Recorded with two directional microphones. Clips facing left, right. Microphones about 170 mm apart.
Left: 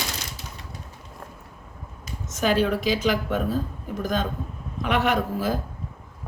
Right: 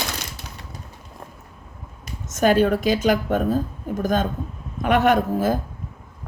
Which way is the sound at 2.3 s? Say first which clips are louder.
Right 5 dB; 50° right (ahead or behind).